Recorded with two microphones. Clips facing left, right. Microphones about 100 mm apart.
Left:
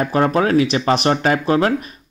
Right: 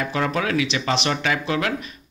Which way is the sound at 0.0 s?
40° left (ahead or behind).